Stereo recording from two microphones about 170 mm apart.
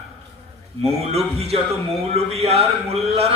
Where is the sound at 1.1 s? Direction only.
35° right (ahead or behind).